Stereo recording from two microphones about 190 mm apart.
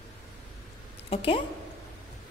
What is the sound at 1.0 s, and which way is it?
Speech, 30° left (ahead or behind).